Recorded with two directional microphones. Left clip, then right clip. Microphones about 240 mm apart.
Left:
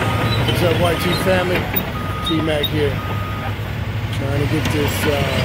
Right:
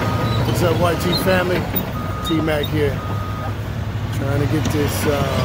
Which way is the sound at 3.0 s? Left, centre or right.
Centre.